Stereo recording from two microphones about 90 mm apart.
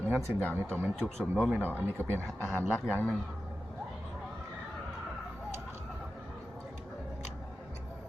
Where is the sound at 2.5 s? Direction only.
20° left (ahead or behind).